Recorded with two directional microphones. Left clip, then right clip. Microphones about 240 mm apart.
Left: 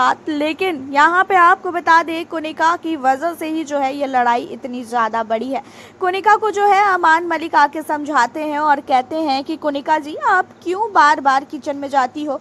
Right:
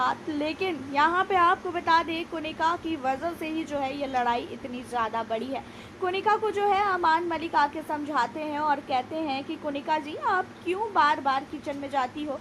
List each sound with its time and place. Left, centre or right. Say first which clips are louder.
0.0 s a woman's voice: left 11 dB; left